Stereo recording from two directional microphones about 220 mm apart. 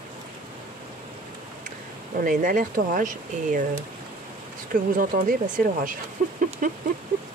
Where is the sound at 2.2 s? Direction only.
35° right (ahead or behind).